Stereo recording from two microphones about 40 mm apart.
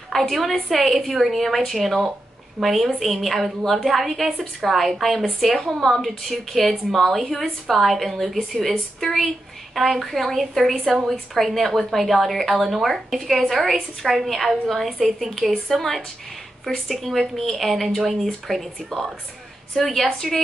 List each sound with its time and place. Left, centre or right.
0.1 s a woman's voice: centre
8.4 s a woman's voice: centre